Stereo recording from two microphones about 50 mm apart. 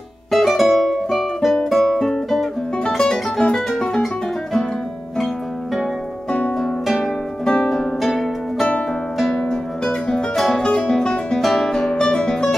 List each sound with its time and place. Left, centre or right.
0.3 s music: centre
6.6 s music: centre
7.4 s music: centre
8.0 s harp: centre
9.3 s music: centre
10.6 s music: centre
11.4 s guitar: centre